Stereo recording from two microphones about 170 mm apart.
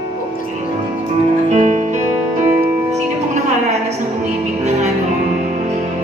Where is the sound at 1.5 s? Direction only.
45° right (ahead or behind).